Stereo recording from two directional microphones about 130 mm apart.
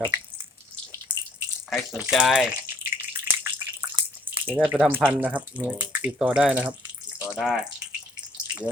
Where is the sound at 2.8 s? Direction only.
15° right (ahead or behind).